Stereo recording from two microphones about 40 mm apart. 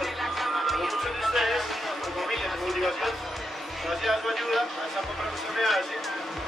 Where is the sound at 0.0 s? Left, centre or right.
Centre.